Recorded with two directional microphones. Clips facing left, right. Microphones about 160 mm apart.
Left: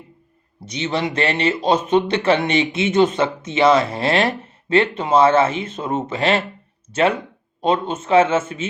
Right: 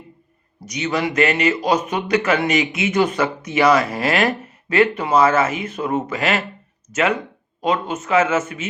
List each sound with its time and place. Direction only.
0.6 s a man's voice: 25° left (ahead or behind)